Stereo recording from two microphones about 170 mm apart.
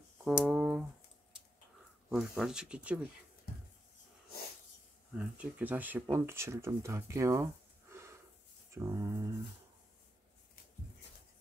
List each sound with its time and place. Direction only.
0.2 s a sound: 5° right (ahead or behind)
2.0 s speech: 5° right (ahead or behind)
5.1 s speech: 5° right (ahead or behind)
7.9 s snort: 15° right (ahead or behind)
8.7 s speech: 15° right (ahead or behind)